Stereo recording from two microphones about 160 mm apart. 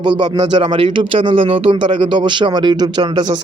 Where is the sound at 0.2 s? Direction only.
25° right (ahead or behind).